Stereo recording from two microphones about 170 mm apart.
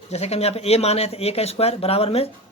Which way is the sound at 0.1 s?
40° left (ahead or behind).